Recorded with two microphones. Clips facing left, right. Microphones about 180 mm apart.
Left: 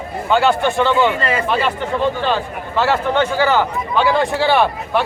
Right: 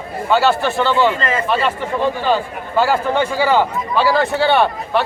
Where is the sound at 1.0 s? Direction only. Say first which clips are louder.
Even; 15° left (ahead or behind).